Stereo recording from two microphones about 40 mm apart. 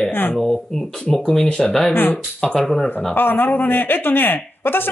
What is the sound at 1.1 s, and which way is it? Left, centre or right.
Speech, centre.